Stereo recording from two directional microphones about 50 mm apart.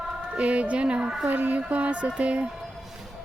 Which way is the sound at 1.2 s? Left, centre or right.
Right.